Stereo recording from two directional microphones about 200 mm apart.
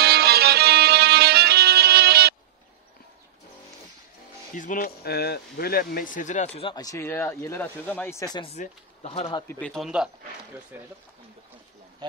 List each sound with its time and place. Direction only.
0.0 s music: 50° right (ahead or behind)
4.6 s speech: 40° left (ahead or behind)
6.7 s speech: 15° left (ahead or behind)
8.5 s speech: 35° left (ahead or behind)
9.5 s speech: 5° left (ahead or behind); by 10.9 s 10° right (ahead or behind)
12.0 s speech: 20° right (ahead or behind)